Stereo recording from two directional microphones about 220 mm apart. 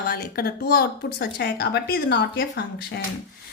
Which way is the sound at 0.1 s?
45° left (ahead or behind).